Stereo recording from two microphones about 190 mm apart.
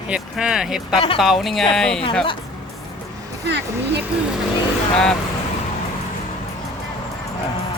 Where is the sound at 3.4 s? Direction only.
60° right (ahead or behind).